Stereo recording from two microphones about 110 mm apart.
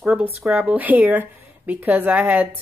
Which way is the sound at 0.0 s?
5° right (ahead or behind).